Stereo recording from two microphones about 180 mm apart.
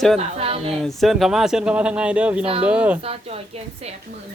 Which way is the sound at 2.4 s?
35° right (ahead or behind).